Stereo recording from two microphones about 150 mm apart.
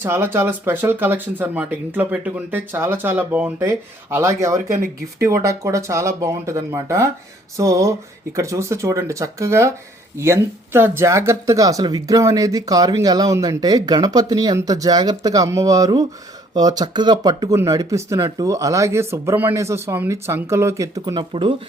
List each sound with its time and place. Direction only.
0.0 s speech: 15° right (ahead or behind); by 21.5 s 35° right (ahead or behind)